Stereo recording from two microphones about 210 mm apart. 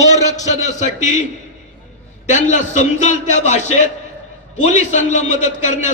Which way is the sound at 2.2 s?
35° left (ahead or behind).